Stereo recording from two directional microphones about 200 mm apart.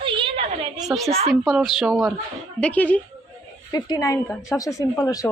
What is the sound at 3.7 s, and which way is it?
Speech, 20° left (ahead or behind).